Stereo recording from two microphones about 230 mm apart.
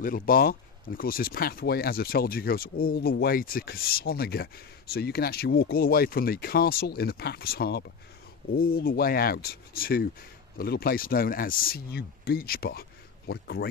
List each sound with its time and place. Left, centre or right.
0.0 s speech: left